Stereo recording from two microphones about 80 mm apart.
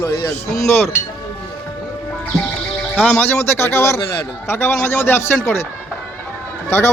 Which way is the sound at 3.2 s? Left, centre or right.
Left.